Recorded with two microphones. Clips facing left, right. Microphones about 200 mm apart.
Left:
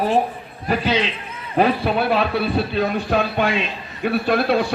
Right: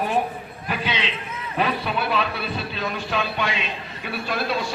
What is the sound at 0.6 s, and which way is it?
A man's voice, 40° left (ahead or behind).